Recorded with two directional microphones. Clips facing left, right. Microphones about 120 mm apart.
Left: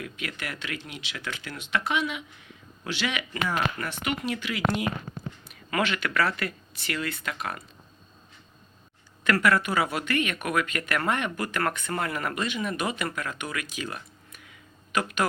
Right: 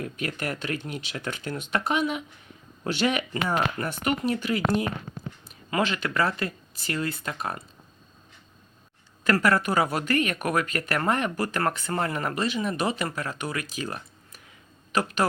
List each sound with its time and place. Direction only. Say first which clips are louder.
0.0 s speech: right 5 dB; 40° right (ahead or behind)
9.2 s speech: right 1 dB; 35° right (ahead or behind)